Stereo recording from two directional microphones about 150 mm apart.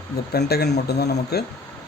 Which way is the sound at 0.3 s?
90° left.